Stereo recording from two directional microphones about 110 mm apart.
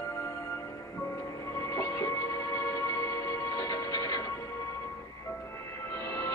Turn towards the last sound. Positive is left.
turn(degrees=25)  # may be behind; listen again after turning